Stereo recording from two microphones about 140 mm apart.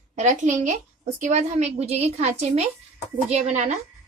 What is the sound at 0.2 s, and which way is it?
A woman's voice, 60° right (ahead or behind).